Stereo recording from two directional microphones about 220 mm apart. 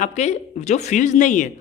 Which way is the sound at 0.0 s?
30° left (ahead or behind).